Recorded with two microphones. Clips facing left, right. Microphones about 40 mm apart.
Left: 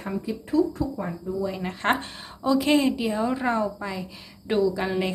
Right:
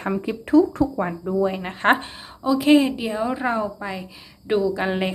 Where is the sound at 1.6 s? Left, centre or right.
Right.